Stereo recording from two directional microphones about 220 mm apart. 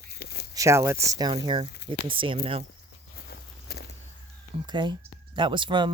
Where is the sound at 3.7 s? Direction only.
45° left (ahead or behind).